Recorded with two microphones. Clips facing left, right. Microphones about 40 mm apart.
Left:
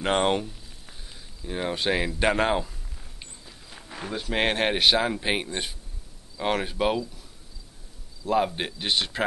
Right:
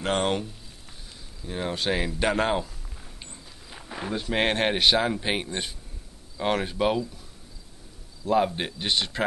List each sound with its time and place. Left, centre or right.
0.0 s speech: centre
3.7 s speech: centre
8.3 s speech: centre